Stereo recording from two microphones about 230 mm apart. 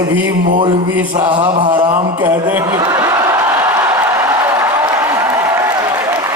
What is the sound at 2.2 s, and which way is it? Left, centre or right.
A man's voice, centre.